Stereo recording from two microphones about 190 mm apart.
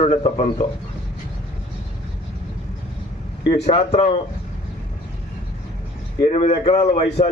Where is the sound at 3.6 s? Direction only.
35° left (ahead or behind).